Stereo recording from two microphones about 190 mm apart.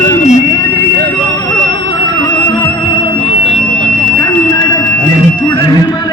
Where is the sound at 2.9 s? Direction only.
25° left (ahead or behind).